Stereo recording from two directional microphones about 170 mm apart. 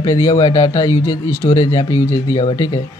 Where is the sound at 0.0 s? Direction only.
20° left (ahead or behind).